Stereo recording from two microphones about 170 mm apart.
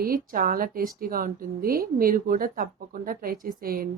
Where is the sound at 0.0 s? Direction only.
55° right (ahead or behind).